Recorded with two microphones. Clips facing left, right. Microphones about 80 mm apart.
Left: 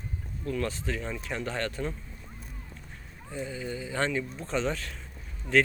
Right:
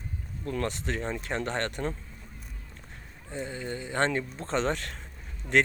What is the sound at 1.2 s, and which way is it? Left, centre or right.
Speech, right.